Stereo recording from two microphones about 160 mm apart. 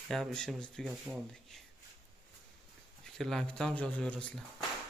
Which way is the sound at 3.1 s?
Centre (ahead or behind).